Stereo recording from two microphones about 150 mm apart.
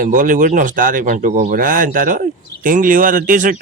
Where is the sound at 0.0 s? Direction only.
60° right (ahead or behind).